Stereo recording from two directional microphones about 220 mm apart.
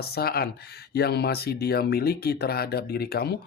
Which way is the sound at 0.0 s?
45° left (ahead or behind).